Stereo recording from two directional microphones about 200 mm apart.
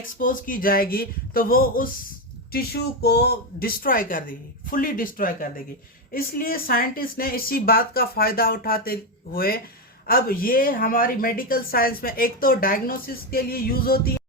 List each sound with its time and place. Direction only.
0.2 s speech: 45° left (ahead or behind)